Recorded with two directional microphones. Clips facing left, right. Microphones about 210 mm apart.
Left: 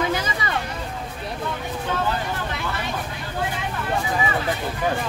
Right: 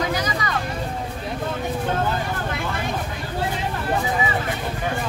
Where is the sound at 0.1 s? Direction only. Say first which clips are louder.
Right 1 dB; 25° left (ahead or behind).